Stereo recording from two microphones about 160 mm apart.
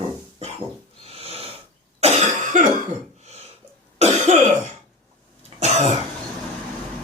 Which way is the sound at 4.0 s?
45° right (ahead or behind).